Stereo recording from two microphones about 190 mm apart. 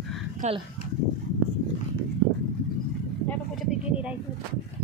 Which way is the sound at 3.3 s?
Centre (ahead or behind).